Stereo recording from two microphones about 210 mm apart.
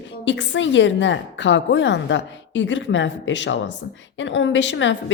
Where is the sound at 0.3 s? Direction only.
60° left (ahead or behind).